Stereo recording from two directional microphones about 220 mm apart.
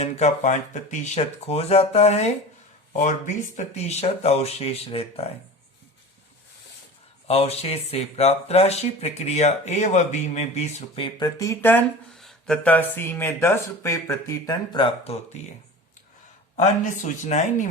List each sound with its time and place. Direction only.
0.0 s speech: 30° left (ahead or behind)
7.3 s speech: 25° left (ahead or behind)
16.6 s speech: 30° left (ahead or behind)